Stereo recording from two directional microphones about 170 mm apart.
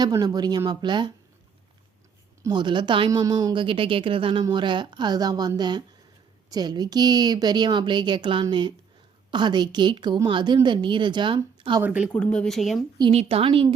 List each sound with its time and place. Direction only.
0.0 s speech: 20° right (ahead or behind)
2.4 s speech: 25° right (ahead or behind)
11.8 s speech: 5° right (ahead or behind)
12.1 s speech: 5° left (ahead or behind)
13.0 s a woman's voice: 35° right (ahead or behind)